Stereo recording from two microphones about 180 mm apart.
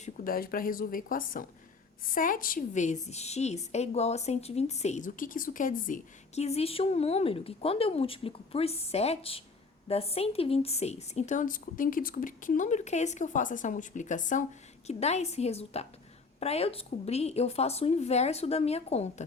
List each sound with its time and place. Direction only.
0.0 s a woman's voice: 55° left (ahead or behind); by 19.2 s 35° left (ahead or behind)